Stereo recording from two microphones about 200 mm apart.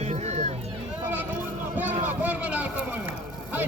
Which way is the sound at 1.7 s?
10° right (ahead or behind).